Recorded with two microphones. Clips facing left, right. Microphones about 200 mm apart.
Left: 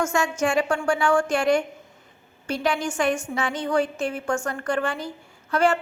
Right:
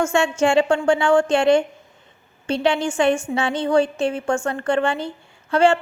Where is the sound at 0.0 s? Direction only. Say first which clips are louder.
Right 5 dB; 30° right (ahead or behind).